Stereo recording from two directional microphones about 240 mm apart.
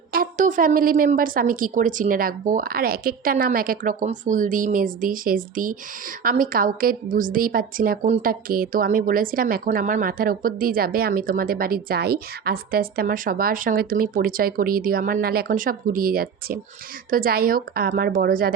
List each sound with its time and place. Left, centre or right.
0.1 s a woman's voice: right